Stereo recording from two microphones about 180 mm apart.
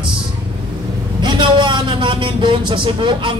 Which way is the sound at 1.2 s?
25° right (ahead or behind).